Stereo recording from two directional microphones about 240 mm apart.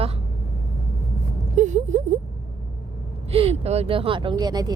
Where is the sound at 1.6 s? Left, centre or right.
Right.